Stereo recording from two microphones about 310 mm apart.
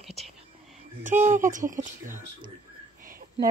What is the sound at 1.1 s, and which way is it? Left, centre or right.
Speech, right.